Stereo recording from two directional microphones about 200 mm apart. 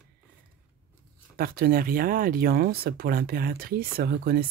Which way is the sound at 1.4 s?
50° right (ahead or behind).